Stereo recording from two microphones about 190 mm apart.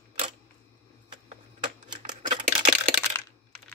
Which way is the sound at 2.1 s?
35° right (ahead or behind).